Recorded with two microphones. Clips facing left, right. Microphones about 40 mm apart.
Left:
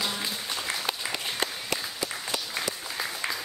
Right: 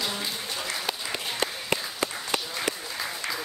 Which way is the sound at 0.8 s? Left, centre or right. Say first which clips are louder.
Even; centre.